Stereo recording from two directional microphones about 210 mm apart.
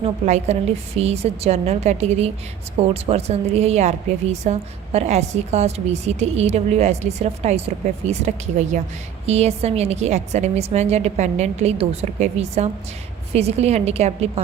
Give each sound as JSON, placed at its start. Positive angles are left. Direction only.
{"t": 0.0, "sound": "a woman's voice", "side_deg": -30}